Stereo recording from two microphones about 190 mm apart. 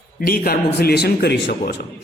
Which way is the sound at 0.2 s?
55° left (ahead or behind).